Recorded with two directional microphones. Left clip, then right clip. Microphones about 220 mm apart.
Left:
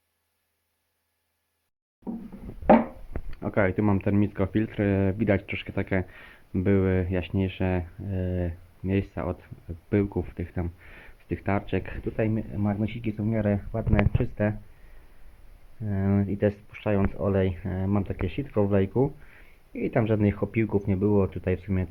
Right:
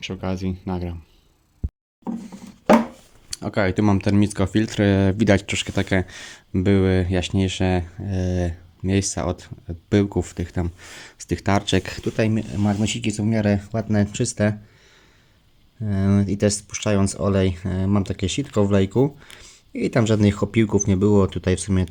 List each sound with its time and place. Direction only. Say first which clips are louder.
3.2 s speech: right 3 dB; 25° right (ahead or behind)
15.8 s speech: right 5 dB; 25° right (ahead or behind)